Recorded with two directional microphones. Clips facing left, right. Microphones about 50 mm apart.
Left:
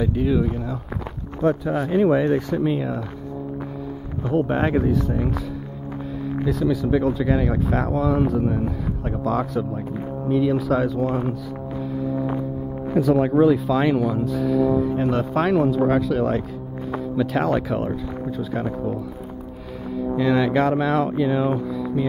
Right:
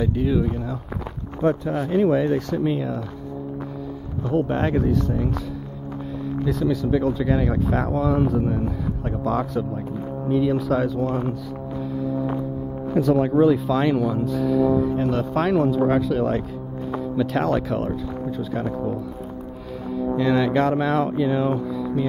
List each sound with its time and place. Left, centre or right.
0.0 s speech: centre
4.3 s speech: centre
6.4 s speech: centre
15.0 s speech: centre
20.2 s speech: centre